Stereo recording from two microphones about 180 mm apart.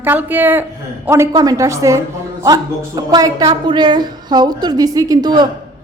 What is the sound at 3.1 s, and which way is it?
A woman's voice, 20° right (ahead or behind).